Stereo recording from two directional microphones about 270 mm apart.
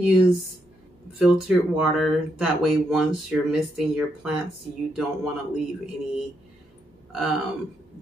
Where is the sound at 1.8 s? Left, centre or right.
Centre.